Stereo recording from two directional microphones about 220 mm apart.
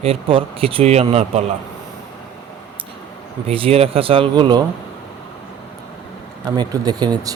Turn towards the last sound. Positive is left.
turn(degrees=-20)  # may be behind; listen again after turning